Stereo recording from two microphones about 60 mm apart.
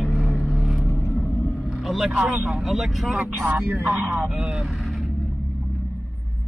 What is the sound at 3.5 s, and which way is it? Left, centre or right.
Speech, right.